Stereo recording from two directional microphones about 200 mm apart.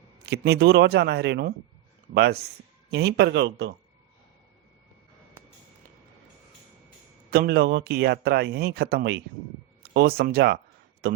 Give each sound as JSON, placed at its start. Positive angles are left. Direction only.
{"t": 0.3, "sound": "speech", "side_deg": -55}
{"t": 7.3, "sound": "a man's voice", "side_deg": -50}